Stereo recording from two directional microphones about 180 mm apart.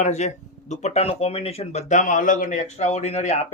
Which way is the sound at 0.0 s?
40° left (ahead or behind).